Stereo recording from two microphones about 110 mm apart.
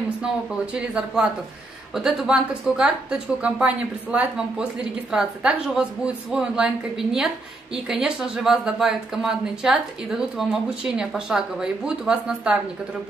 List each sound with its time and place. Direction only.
0.7 s a woman's voice: 5° right (ahead or behind)